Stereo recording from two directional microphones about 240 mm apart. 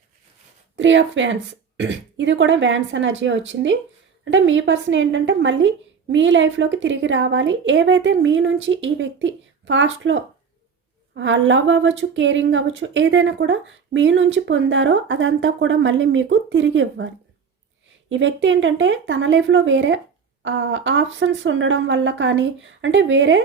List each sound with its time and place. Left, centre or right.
0.8 s a woman's voice: right
18.1 s a woman's voice: right